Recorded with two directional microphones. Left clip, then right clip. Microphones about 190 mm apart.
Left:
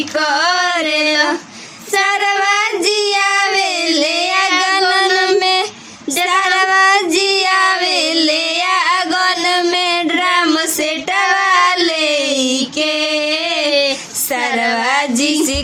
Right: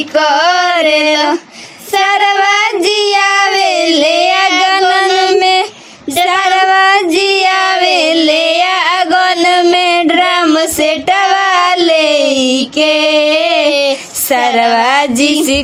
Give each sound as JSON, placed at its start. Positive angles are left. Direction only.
{"t": 0.2, "sound": "female singing", "side_deg": -30}
{"t": 2.0, "sound": "child singing", "side_deg": -30}
{"t": 14.5, "sound": "music", "side_deg": -35}